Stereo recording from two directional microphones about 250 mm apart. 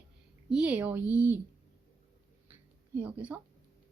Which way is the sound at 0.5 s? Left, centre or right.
Centre.